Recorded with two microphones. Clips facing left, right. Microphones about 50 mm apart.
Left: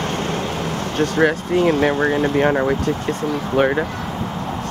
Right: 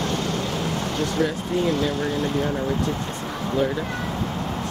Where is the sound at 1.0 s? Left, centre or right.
Left.